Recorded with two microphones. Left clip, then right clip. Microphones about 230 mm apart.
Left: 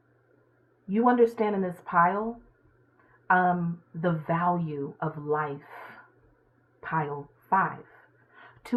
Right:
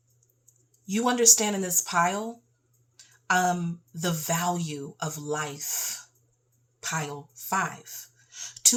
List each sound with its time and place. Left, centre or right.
0.9 s speech: right
3.2 s a woman's voice: right